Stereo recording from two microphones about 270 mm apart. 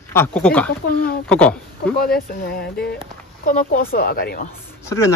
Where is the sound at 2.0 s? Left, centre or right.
Left.